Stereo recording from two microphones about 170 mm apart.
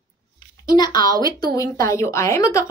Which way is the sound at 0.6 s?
25° left (ahead or behind).